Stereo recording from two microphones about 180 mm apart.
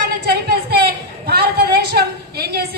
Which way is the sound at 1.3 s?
60° right (ahead or behind).